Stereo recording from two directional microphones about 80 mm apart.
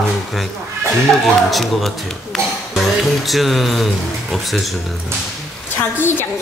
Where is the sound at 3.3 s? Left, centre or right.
Centre.